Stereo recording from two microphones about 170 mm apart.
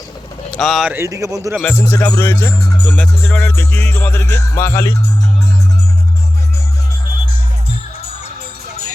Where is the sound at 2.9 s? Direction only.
10° left (ahead or behind).